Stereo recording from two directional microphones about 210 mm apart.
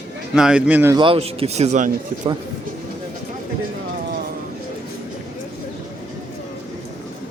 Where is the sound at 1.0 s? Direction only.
25° right (ahead or behind).